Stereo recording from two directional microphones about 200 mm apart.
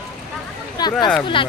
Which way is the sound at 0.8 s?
20° left (ahead or behind).